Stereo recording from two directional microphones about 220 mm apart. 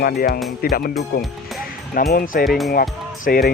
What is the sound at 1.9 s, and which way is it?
Speech, 45° left (ahead or behind).